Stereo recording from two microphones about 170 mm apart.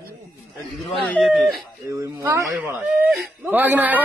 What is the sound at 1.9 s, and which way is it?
Speech, 20° right (ahead or behind).